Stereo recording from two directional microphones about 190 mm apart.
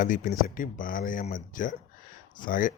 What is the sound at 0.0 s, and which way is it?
Speech, 45° left (ahead or behind).